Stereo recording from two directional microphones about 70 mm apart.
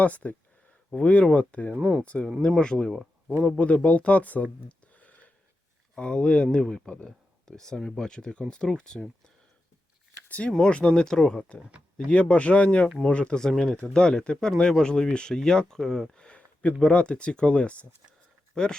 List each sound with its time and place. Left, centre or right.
0.0 s speech: left
1.8 s speech: centre
2.6 s speech: centre
4.9 s a sound: left
5.9 s speech: centre
10.2 s speech: centre
13.5 s speech: centre
13.7 s speech: centre